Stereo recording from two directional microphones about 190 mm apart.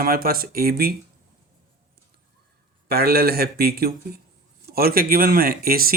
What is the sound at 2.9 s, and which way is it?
Speech, 55° right (ahead or behind).